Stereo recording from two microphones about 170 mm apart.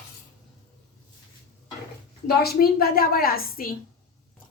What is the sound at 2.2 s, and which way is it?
A woman's voice, 65° left (ahead or behind).